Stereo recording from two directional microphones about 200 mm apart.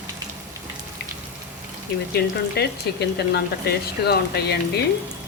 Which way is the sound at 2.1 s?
55° left (ahead or behind).